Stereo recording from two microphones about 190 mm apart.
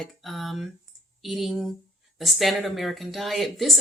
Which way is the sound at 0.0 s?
Centre (ahead or behind).